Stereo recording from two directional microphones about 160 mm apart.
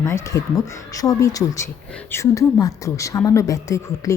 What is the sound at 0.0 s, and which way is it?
Speech, 20° left (ahead or behind).